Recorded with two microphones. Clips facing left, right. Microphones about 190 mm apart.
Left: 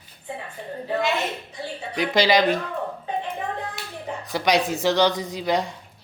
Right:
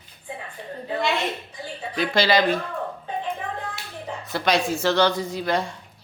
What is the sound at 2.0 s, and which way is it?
Speech, 15° left (ahead or behind).